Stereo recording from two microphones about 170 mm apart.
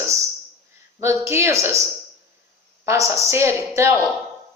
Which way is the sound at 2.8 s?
15° right (ahead or behind).